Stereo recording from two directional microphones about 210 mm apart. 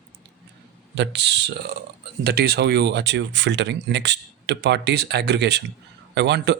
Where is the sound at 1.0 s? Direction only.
55° right (ahead or behind).